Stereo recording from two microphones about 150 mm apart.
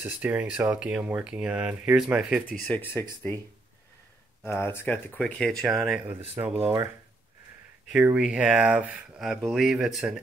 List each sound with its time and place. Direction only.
0.0 s speech: 10° right (ahead or behind)
2.4 s speech: 10° left (ahead or behind)
4.5 s speech: 15° left (ahead or behind); by 5.9 s centre (ahead or behind)
6.4 s speech: 40° right (ahead or behind)
7.9 s speech: 5° right (ahead or behind)